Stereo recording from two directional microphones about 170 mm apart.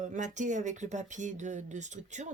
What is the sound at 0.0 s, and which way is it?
Speech, 45° right (ahead or behind).